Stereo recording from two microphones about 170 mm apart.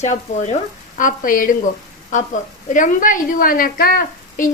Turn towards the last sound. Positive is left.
turn(degrees=55)  # may be behind; listen again after turning